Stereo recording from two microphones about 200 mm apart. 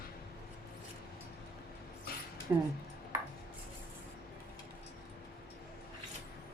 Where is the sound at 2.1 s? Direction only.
50° left (ahead or behind).